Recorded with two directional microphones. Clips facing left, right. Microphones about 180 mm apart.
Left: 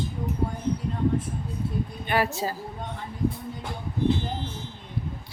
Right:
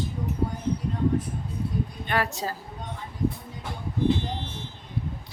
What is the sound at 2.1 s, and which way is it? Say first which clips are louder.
Speech: left 3 dB; 5° left (ahead or behind).